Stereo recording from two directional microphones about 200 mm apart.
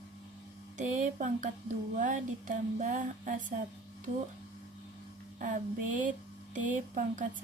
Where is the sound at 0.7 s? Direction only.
40° right (ahead or behind).